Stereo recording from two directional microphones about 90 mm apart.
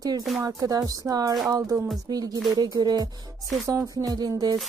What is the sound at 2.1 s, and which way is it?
Music, 45° right (ahead or behind).